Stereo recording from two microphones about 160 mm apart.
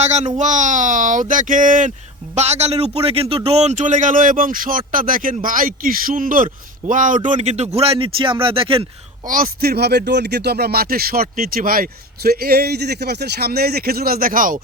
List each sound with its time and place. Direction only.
0.0 s a man's voice: 45° right (ahead or behind)
2.3 s a man's voice: 45° right (ahead or behind)
9.2 s speech: 60° right (ahead or behind)